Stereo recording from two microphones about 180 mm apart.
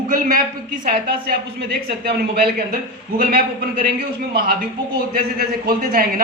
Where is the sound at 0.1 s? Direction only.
50° right (ahead or behind).